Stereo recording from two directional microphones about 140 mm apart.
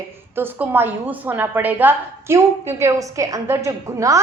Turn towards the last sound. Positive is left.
turn(degrees=-20)  # may be behind; listen again after turning